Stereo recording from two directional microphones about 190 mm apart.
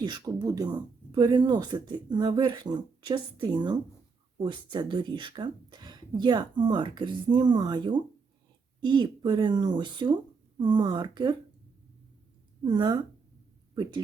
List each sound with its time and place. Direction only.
0.0 s speech: 20° right (ahead or behind)
12.6 s speech: 25° right (ahead or behind)